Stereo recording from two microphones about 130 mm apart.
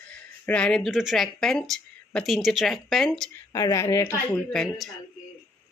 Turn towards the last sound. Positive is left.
turn(degrees=5)  # may be behind; listen again after turning